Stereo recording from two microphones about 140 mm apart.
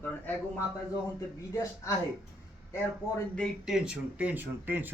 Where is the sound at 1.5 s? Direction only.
20° left (ahead or behind).